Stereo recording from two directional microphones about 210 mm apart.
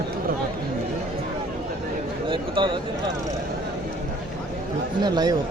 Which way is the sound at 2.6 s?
25° right (ahead or behind).